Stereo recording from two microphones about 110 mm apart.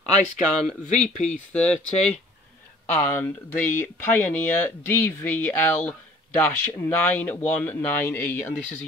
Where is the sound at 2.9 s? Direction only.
20° left (ahead or behind).